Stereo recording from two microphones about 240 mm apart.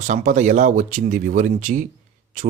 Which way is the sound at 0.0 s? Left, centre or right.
Right.